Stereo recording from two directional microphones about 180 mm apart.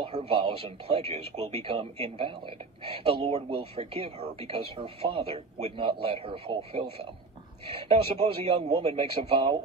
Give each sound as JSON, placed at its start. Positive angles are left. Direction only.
{"t": 0.0, "sound": "a man's voice", "side_deg": -30}